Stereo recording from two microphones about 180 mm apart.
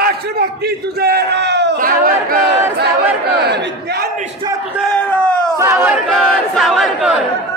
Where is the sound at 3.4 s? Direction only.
65° right (ahead or behind).